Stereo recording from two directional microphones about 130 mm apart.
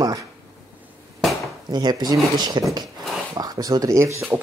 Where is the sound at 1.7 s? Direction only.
30° right (ahead or behind).